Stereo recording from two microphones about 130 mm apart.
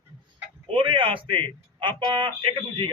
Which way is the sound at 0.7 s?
40° right (ahead or behind).